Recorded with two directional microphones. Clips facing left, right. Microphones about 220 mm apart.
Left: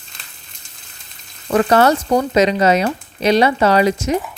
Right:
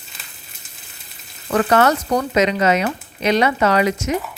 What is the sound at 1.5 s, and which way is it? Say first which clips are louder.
Speech: left 3 dB; 30° left (ahead or behind).